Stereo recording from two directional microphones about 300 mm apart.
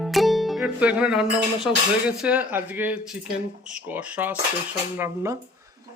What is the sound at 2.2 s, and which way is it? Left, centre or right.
Speech, centre.